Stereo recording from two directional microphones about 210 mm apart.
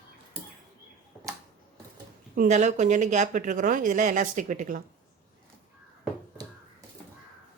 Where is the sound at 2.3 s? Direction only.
40° right (ahead or behind).